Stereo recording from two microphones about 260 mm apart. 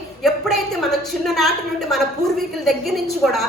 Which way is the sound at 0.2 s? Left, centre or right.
Centre.